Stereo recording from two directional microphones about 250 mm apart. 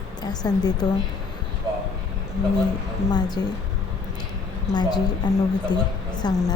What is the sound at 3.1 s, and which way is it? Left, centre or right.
Speech, centre.